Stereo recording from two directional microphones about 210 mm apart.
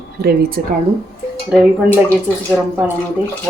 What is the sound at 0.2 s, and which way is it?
Speech, 50° right (ahead or behind).